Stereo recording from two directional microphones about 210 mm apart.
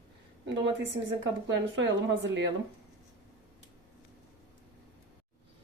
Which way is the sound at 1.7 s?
60° right (ahead or behind).